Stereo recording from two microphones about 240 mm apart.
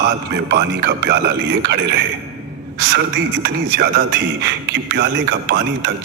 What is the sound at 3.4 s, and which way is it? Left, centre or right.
Speech, right.